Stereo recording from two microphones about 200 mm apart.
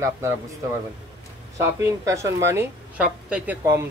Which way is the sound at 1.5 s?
15° right (ahead or behind).